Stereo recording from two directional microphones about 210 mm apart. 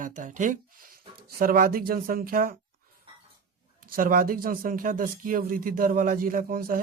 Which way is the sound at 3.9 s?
40° right (ahead or behind).